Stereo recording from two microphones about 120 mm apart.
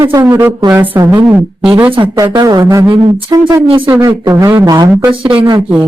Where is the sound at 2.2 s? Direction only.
30° right (ahead or behind).